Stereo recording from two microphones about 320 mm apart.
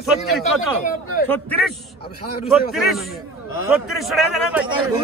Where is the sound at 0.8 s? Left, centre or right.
Left.